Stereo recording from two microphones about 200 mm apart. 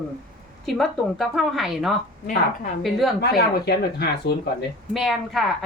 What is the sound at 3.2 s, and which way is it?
Speech, 55° left (ahead or behind).